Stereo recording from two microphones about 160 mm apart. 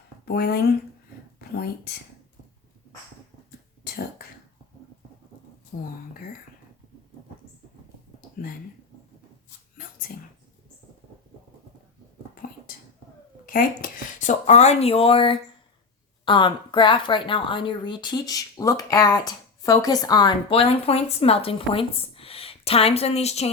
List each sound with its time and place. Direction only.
0.3 s speech: 75° left (ahead or behind)
5.7 s speech: 55° left (ahead or behind)
12.3 s whispering: 60° left (ahead or behind)
13.4 s speech: 65° left (ahead or behind); by 20.3 s 25° left (ahead or behind)
20.5 s speech: 40° left (ahead or behind)